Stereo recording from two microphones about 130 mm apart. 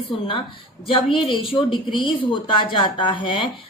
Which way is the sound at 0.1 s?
40° left (ahead or behind).